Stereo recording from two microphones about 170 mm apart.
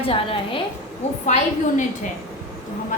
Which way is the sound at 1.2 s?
45° left (ahead or behind).